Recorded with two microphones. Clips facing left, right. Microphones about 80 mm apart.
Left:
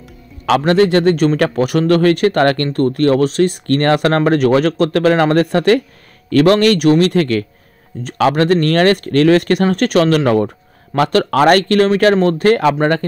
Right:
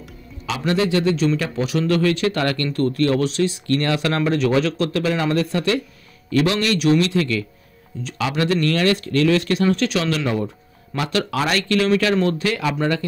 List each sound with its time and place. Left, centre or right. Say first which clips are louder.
0.5 s speech: left 9 dB; left